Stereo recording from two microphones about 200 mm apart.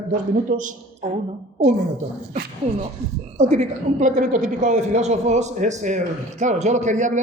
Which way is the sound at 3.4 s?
35° right (ahead or behind).